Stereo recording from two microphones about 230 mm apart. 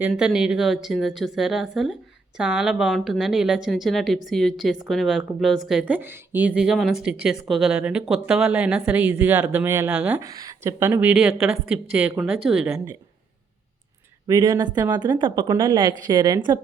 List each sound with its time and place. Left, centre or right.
0.0 s a woman's voice: centre
14.3 s speech: centre